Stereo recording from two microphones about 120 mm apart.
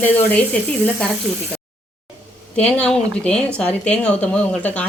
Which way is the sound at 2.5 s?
10° left (ahead or behind).